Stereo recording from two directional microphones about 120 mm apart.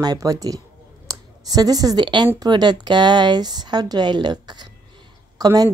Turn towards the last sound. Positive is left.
turn(degrees=-30)  # may be behind; listen again after turning